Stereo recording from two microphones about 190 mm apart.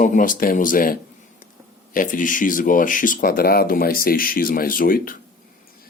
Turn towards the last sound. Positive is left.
turn(degrees=50)  # may be behind; listen again after turning